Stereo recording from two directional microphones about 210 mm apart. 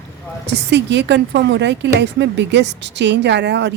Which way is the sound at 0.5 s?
55° right (ahead or behind).